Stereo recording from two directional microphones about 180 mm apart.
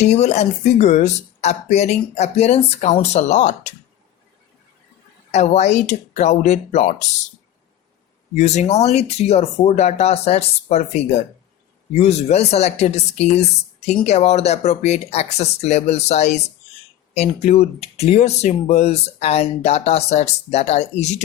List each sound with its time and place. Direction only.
0.0 s speech: 40° left (ahead or behind)
5.3 s speech: 40° left (ahead or behind)
8.4 s speech: 40° left (ahead or behind)